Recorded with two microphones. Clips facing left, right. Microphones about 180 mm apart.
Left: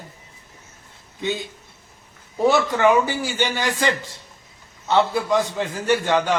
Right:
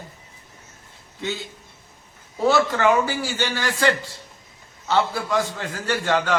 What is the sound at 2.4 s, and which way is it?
A man's voice, 20° left (ahead or behind).